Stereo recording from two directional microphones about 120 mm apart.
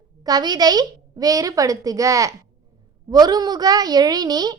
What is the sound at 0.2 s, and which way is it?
A woman's voice, 35° right (ahead or behind).